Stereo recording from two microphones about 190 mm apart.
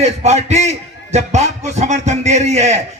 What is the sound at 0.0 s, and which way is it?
Speech, 35° right (ahead or behind).